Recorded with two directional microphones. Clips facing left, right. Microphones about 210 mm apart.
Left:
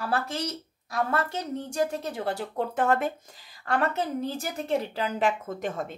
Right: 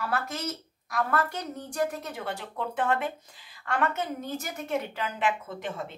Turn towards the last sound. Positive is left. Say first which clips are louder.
# left 4 dB
turn(degrees=45)  # may be behind; listen again after turning